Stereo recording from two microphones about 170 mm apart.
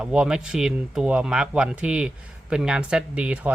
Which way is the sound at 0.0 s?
5° right (ahead or behind).